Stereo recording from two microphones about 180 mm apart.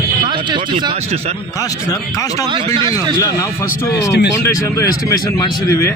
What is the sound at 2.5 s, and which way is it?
Speech, 25° right (ahead or behind).